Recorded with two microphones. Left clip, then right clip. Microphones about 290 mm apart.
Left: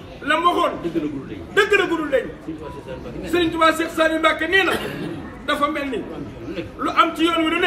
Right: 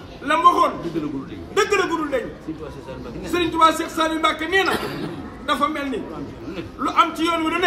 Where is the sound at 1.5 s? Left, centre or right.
Centre.